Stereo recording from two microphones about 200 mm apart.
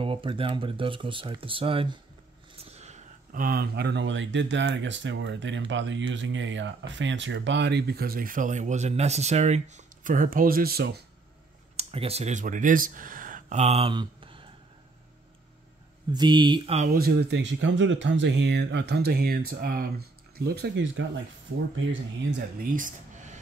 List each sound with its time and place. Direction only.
0.0 s speech: 25° right (ahead or behind); by 11.0 s 50° right (ahead or behind)
11.7 s speech: 30° right (ahead or behind)
16.1 s speech: 20° right (ahead or behind); by 21.0 s 60° right (ahead or behind)
22.6 s a sound: 40° right (ahead or behind)